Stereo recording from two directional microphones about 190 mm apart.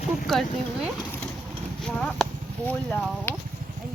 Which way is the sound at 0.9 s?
10° left (ahead or behind).